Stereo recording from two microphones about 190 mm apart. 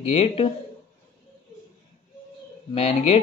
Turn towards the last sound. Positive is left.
turn(degrees=30)  # may be behind; listen again after turning